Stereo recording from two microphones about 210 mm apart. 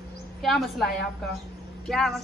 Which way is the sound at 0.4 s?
Centre (ahead or behind).